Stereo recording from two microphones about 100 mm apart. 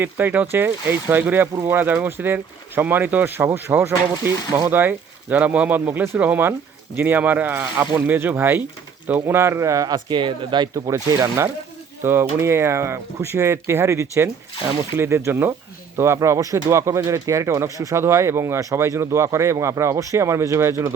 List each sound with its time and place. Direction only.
0.0 s speech: 20° right (ahead or behind); by 10.7 s 50° right (ahead or behind)
10.8 s speech: 35° right (ahead or behind)